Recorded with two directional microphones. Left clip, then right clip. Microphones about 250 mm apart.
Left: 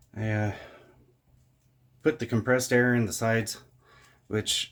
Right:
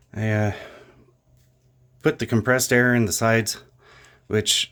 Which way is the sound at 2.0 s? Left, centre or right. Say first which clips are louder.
Right 5 dB; right.